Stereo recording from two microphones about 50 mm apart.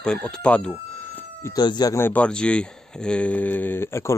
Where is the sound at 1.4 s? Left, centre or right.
Left.